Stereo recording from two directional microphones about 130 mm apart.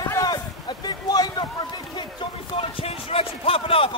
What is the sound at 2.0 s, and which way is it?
Basketball bounce, 40° left (ahead or behind).